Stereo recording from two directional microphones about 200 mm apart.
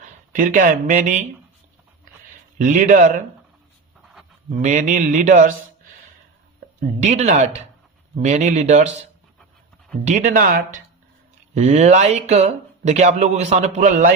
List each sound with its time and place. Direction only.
0.0 s speech: 40° right (ahead or behind)
2.6 s speech: 40° right (ahead or behind)
4.6 s speech: 35° right (ahead or behind)
7.0 s speech: 35° right (ahead or behind)